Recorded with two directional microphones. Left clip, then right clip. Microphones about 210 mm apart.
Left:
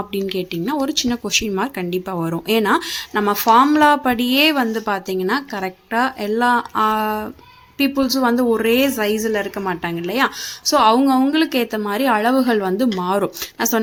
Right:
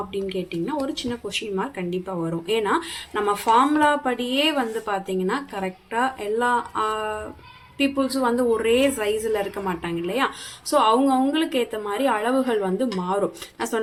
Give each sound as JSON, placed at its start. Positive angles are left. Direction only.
{"t": 0.1, "sound": "speech", "side_deg": 45}